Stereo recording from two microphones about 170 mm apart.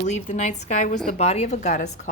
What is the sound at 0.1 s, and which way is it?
A woman's voice, 45° left (ahead or behind).